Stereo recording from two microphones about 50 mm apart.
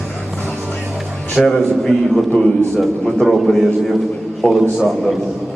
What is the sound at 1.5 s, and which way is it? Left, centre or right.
A man's voice, centre.